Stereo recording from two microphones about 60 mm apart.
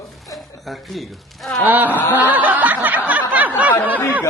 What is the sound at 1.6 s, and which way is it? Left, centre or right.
Speech, right.